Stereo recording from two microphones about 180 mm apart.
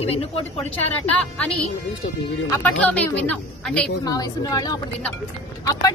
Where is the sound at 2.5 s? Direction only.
10° left (ahead or behind).